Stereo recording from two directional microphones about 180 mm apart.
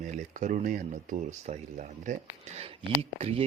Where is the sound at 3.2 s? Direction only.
35° right (ahead or behind).